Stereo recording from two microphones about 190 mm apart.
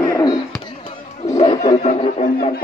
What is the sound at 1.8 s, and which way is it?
Speech, 30° left (ahead or behind).